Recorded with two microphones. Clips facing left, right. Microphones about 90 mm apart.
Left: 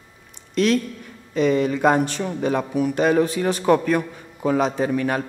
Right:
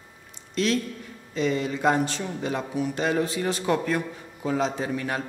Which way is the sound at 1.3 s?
55° left (ahead or behind).